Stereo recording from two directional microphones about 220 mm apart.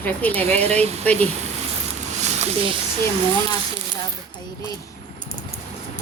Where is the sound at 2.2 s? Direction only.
30° right (ahead or behind).